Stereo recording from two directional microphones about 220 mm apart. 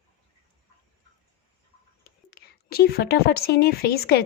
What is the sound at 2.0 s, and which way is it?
Speech, 45° left (ahead or behind).